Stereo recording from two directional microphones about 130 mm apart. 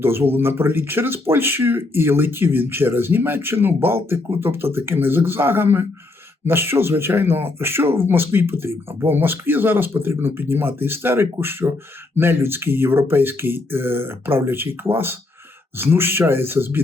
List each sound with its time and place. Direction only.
0.0 s speech: 15° right (ahead or behind)
15.8 s speech: 15° right (ahead or behind)